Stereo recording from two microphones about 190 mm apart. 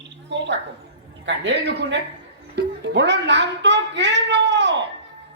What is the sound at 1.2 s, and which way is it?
Speech, 70° right (ahead or behind).